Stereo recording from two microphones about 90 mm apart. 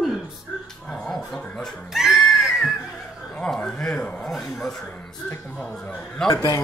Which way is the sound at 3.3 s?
15° left (ahead or behind).